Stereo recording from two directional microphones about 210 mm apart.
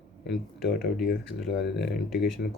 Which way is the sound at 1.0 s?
50° left (ahead or behind).